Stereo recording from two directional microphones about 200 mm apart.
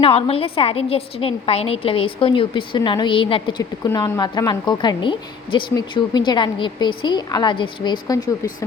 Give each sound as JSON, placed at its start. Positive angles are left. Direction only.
{"t": 0.0, "sound": "a woman's voice", "side_deg": 30}